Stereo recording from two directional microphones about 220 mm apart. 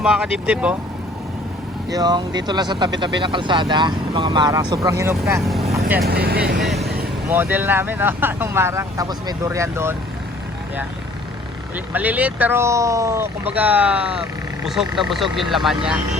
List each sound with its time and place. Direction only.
0.0 s speech: 5° right (ahead or behind)
1.9 s speech: 20° right (ahead or behind)
5.2 s speech: centre (ahead or behind)
6.1 s speech: 45° right (ahead or behind)
6.6 s speech: centre (ahead or behind)
11.9 s speech: 5° right (ahead or behind)